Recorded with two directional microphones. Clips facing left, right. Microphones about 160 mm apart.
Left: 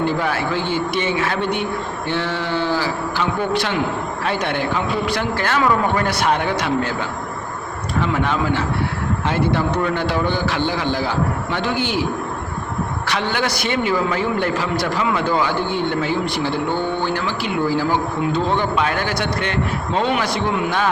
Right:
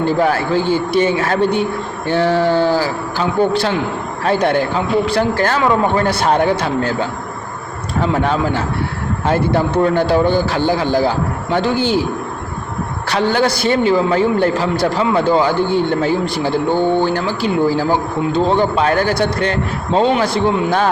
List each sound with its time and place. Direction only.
0.0 s a man's voice: 40° right (ahead or behind)
8.0 s a man's voice: 35° right (ahead or behind)
13.1 s a man's voice: 35° right (ahead or behind)